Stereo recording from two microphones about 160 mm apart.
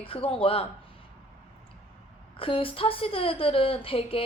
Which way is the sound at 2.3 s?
35° left (ahead or behind).